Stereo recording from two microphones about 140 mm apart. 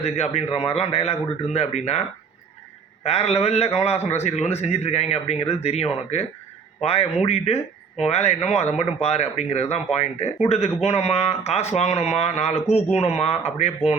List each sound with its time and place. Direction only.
0.0 s speech: 50° left (ahead or behind)